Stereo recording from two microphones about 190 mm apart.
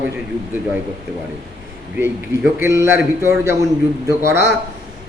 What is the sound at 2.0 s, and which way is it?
A man's voice, 10° right (ahead or behind).